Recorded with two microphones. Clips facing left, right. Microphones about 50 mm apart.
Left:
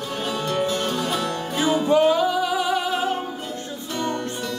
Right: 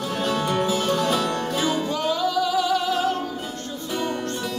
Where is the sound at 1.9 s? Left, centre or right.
Left.